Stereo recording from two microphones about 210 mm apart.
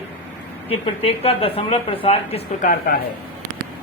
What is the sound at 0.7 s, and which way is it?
Speech, 25° left (ahead or behind).